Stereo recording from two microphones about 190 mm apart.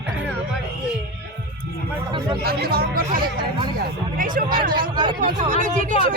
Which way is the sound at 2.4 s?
55° right (ahead or behind).